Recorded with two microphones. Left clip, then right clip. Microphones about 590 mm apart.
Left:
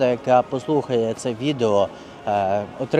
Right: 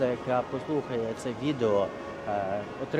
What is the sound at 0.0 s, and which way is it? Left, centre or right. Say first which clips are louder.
Speech: left 10 dB; left.